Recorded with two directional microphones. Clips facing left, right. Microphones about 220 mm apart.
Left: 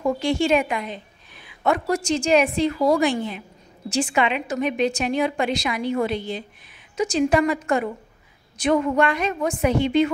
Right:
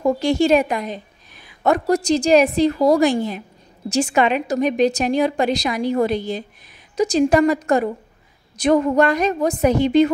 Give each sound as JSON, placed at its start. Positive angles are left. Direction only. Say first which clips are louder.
{"t": 0.0, "sound": "a woman's voice", "louder": "right 4 dB", "side_deg": -40}